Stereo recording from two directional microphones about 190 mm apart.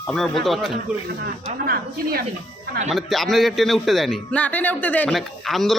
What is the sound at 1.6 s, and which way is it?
Speech, 50° right (ahead or behind).